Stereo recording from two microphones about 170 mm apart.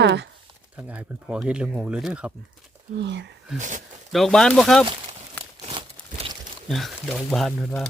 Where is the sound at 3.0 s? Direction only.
90° right.